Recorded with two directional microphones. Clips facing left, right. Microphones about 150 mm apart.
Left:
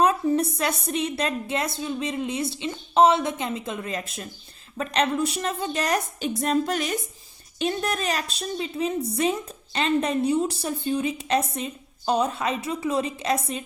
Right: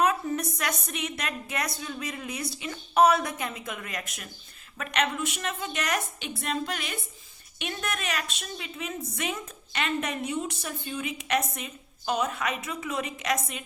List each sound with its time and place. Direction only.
0.0 s a woman's voice: 30° left (ahead or behind)